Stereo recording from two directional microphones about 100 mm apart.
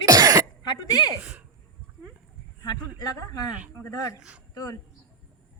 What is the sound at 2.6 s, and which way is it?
Speech, 45° left (ahead or behind).